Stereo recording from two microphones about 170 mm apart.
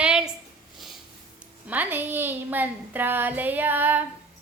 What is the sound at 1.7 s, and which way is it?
Speech, 10° right (ahead or behind).